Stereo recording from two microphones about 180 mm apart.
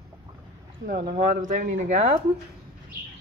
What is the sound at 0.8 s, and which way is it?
Speech, 55° right (ahead or behind).